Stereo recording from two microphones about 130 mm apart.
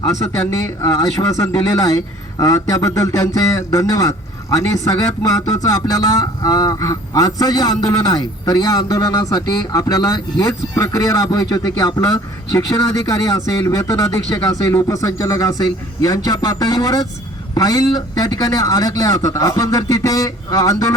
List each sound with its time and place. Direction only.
0.0 s speech: 25° left (ahead or behind)